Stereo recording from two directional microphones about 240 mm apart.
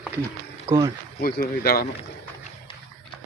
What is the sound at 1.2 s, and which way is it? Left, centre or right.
Speech, left.